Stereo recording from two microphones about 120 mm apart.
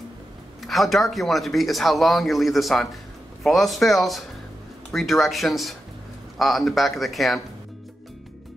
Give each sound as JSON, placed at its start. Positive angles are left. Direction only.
{"t": 0.7, "sound": "speech", "side_deg": 0}